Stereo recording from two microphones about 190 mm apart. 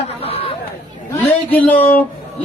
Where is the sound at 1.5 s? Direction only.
10° left (ahead or behind).